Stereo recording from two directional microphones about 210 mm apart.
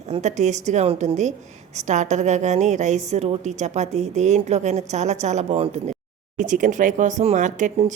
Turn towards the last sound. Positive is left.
turn(degrees=-35)  # may be behind; listen again after turning